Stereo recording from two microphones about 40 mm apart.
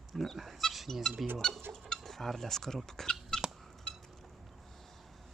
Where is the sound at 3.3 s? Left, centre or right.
Centre.